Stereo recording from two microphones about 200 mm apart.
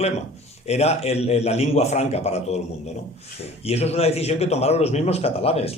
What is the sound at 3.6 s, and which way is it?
Speech, 30° left (ahead or behind).